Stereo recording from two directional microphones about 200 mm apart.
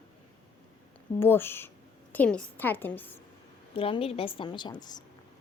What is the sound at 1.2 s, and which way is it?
A woman's voice, 10° left (ahead or behind).